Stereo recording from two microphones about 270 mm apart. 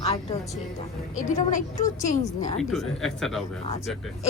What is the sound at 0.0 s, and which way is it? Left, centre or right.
Music, left.